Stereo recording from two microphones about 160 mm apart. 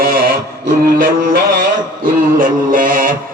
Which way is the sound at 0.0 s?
70° right (ahead or behind).